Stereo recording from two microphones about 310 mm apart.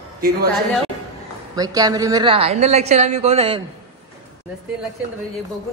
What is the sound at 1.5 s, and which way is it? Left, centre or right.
A woman's voice, centre.